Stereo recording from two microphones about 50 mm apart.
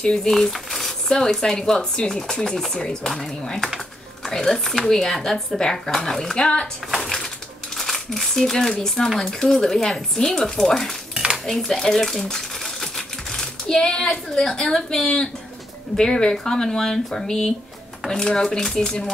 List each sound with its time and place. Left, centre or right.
0.0 s cutlery: centre
3.6 s a sound: centre
4.3 s cutlery: centre
6.3 s speech: left
6.9 s speech: centre
9.2 s cutlery: centre
11.4 s speech: centre
16.0 s cutlery: centre